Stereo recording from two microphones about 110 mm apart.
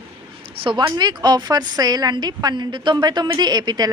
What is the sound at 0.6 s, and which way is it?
A woman's voice, 40° right (ahead or behind).